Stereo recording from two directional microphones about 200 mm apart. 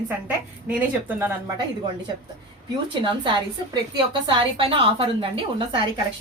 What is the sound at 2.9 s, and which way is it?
A woman's voice, 25° right (ahead or behind).